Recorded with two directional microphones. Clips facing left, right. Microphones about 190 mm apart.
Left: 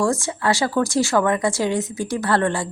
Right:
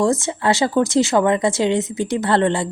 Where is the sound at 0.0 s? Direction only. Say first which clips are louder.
Right 3 dB; 20° right (ahead or behind).